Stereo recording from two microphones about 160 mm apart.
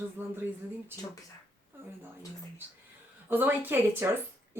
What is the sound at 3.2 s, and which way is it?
Speech, 15° right (ahead or behind).